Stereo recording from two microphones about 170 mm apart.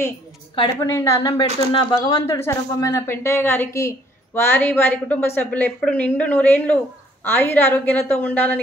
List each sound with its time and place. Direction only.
0.6 s a woman's voice: 20° left (ahead or behind)
1.4 s a woman's voice: 30° left (ahead or behind)
2.0 s a woman's voice: 20° left (ahead or behind)